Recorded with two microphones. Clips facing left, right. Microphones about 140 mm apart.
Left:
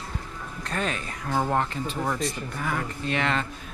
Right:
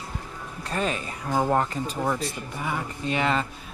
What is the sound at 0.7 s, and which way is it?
A man's voice, 5° right (ahead or behind).